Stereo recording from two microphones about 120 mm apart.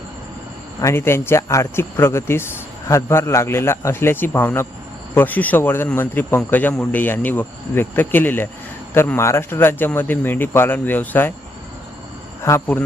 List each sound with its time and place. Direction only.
0.8 s a man's voice: 20° left (ahead or behind)
12.4 s speech: 20° left (ahead or behind)